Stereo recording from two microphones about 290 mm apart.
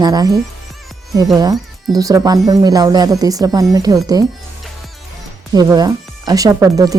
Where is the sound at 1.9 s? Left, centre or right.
Centre.